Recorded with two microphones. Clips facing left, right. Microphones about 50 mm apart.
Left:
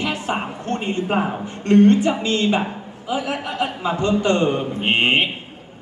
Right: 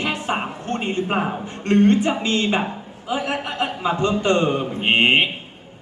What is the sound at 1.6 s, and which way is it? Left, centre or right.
A woman's voice, right.